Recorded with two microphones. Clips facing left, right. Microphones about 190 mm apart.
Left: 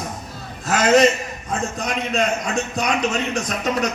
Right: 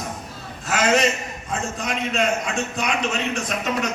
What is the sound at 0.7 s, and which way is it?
A man's voice, 40° left (ahead or behind).